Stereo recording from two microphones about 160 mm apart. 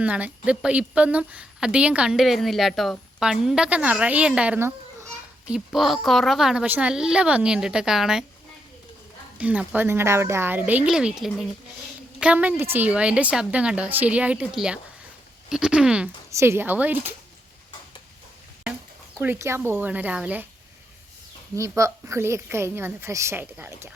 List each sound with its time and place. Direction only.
0.0 s a woman's voice: 10° right (ahead or behind)
9.4 s a woman's voice: 10° right (ahead or behind)
16.3 s a woman's voice: 15° right (ahead or behind)
19.2 s a woman's voice: 15° right (ahead or behind)
21.5 s a woman's voice: 20° right (ahead or behind)